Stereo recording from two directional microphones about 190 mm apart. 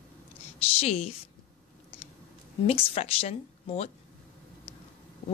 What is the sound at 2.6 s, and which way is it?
Speech, 35° left (ahead or behind).